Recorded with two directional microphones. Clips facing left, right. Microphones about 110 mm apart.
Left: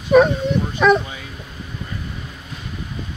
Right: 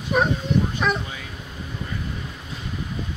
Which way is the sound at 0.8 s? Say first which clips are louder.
Left 14 dB; 90° left.